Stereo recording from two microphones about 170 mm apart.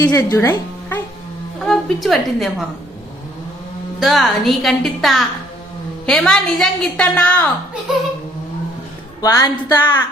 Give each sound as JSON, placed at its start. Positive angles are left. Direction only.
{"t": 0.0, "sound": "speech", "side_deg": 20}
{"t": 1.6, "sound": "a woman's voice", "side_deg": 0}
{"t": 4.0, "sound": "a woman's voice", "side_deg": 0}
{"t": 9.2, "sound": "speech", "side_deg": 20}